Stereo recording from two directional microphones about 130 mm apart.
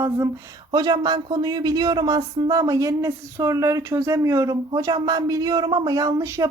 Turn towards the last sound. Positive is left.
turn(degrees=-25)  # may be behind; listen again after turning